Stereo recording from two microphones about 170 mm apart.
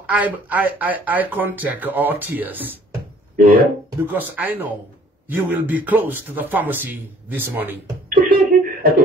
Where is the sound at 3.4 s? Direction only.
60° right (ahead or behind).